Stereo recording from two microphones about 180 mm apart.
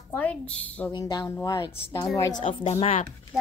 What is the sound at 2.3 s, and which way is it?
Speech, 35° left (ahead or behind).